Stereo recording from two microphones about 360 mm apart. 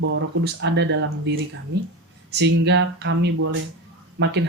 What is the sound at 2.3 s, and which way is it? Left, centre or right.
Speech, right.